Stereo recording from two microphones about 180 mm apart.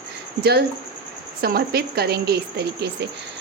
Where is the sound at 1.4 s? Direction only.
60° right (ahead or behind).